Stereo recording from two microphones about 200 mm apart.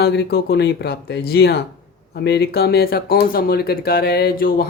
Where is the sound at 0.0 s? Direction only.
55° left (ahead or behind).